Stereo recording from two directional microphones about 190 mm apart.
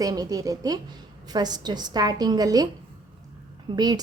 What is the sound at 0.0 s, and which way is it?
A woman's voice, 20° right (ahead or behind).